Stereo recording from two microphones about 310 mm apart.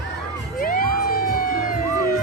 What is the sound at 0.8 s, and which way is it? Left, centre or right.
Music, right.